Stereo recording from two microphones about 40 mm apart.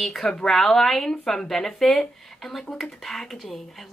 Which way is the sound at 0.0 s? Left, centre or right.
Centre.